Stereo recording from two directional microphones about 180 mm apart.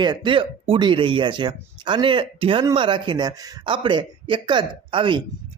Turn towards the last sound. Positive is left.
turn(degrees=-25)  # may be behind; listen again after turning